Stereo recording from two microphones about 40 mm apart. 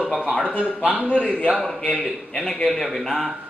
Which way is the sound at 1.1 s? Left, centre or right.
Left.